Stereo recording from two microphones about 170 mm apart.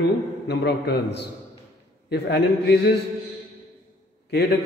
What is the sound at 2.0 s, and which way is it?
Speech, 75° left (ahead or behind).